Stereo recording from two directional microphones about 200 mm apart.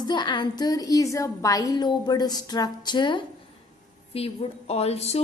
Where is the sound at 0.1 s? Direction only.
20° left (ahead or behind).